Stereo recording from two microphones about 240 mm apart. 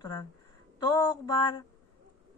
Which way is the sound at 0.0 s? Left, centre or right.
Centre.